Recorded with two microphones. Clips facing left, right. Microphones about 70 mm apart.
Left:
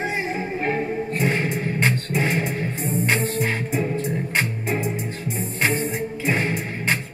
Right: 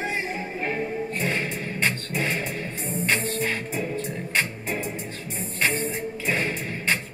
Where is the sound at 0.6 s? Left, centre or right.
Left.